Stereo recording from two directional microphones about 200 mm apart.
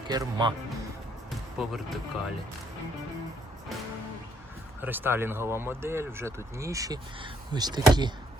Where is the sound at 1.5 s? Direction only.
Centre (ahead or behind).